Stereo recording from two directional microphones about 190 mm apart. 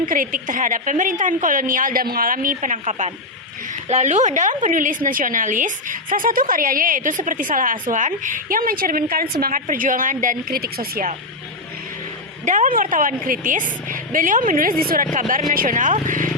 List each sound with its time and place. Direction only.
0.0 s a woman's voice: 45° right (ahead or behind)
12.5 s a woman's voice: 45° right (ahead or behind)